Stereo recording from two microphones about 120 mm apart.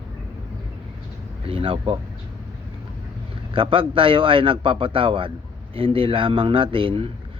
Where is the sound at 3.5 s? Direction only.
45° right (ahead or behind).